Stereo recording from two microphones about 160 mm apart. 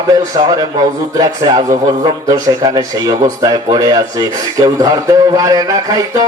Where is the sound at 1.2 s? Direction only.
25° right (ahead or behind).